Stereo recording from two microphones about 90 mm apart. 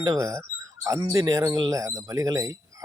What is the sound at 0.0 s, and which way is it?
Speech, 40° right (ahead or behind).